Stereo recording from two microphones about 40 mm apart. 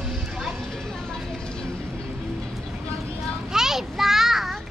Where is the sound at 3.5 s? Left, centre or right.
Centre.